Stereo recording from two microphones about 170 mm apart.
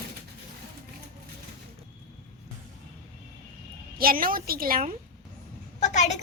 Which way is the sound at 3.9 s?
60° right (ahead or behind).